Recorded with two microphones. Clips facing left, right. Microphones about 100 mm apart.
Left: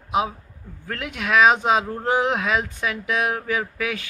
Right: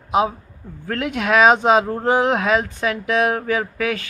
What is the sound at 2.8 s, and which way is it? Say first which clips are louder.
Speech: right 6 dB; 5° left (ahead or behind).